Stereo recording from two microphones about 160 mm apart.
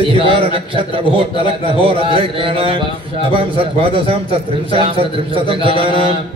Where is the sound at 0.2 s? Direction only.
35° right (ahead or behind).